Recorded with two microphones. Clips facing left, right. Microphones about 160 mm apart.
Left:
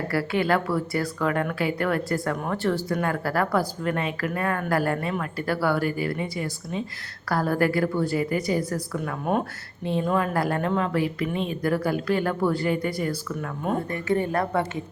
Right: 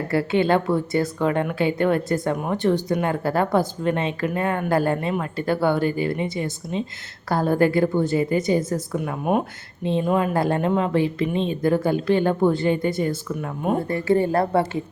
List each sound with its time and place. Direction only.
0.1 s a woman's voice: 25° right (ahead or behind)